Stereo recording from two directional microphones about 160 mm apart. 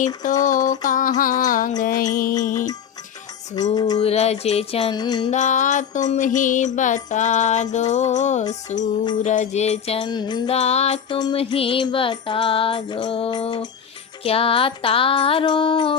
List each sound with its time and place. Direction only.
0.0 s music: 50° left (ahead or behind)
3.5 s a sound: 25° left (ahead or behind)
4.0 s music: 40° left (ahead or behind)
4.9 s a sound: 25° left (ahead or behind)
5.3 s music: 50° left (ahead or behind); by 10.5 s 25° left (ahead or behind)
10.5 s music: 40° left (ahead or behind)
11.2 s music: 30° left (ahead or behind)